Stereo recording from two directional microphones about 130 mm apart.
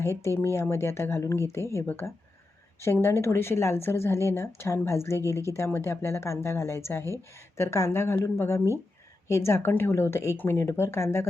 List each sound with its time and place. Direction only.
0.4 s speech: 20° left (ahead or behind)